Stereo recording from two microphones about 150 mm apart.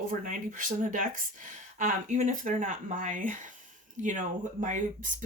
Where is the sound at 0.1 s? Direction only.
60° right (ahead or behind).